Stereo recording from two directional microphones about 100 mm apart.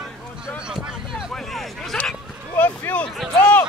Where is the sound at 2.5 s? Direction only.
20° left (ahead or behind).